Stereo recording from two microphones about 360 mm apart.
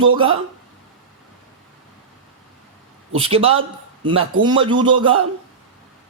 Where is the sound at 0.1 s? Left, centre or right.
Centre.